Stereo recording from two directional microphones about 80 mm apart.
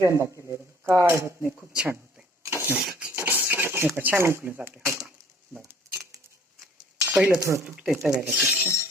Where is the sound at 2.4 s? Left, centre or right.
Right.